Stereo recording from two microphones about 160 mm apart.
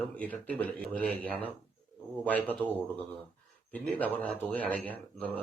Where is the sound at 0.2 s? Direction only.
10° left (ahead or behind).